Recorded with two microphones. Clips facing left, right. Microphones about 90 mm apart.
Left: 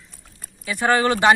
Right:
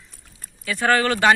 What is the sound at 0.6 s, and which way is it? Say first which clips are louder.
Speech: left 1 dB; 20° left (ahead or behind).